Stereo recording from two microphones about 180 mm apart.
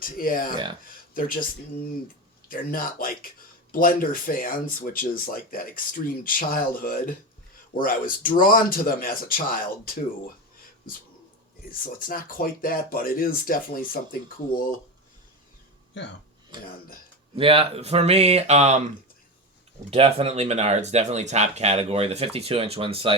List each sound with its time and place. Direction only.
0.0 s speech: 50° left (ahead or behind)
0.5 s speech: 25° right (ahead or behind)
1.1 s speech: 50° left (ahead or behind)
2.5 s speech: 50° left (ahead or behind)
11.9 s speech: 50° left (ahead or behind)
15.9 s speech: 85° left
17.3 s speech: 30° right (ahead or behind)
19.9 s speech: 35° right (ahead or behind)